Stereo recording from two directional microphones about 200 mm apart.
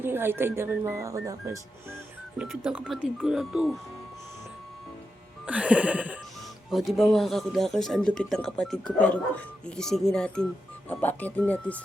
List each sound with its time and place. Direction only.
0.0 s speech: 10° right (ahead or behind)
2.4 s speech: 5° right (ahead or behind)
5.5 s speech: 5° right (ahead or behind)